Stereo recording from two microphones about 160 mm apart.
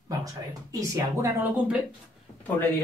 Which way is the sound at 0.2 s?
20° right (ahead or behind).